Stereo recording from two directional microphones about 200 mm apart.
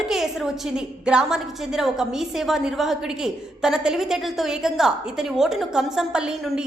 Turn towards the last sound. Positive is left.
turn(degrees=-5)  # may be behind; listen again after turning